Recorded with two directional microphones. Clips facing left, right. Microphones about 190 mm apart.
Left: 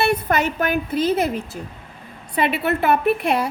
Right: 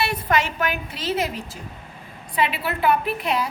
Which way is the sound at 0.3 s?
50° left (ahead or behind).